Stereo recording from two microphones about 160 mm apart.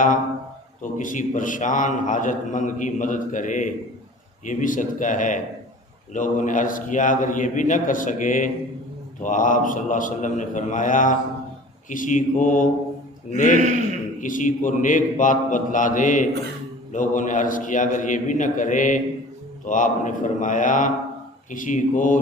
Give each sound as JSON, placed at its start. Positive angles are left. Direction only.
{"t": 0.8, "sound": "a man's voice", "side_deg": 55}
{"t": 13.6, "sound": "a man's voice", "side_deg": -50}
{"t": 14.2, "sound": "a man's voice", "side_deg": 55}